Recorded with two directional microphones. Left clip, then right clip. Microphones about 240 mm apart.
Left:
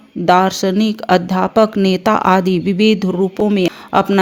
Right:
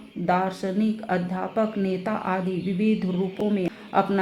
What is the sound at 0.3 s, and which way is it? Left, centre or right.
Speech, left.